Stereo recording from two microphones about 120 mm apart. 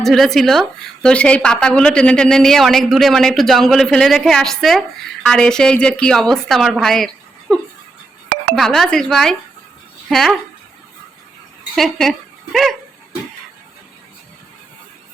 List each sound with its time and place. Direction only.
0.0 s a woman's voice: 5° left (ahead or behind)
11.7 s a woman's voice: centre (ahead or behind)